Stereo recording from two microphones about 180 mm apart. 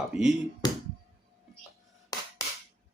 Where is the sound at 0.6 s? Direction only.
20° left (ahead or behind).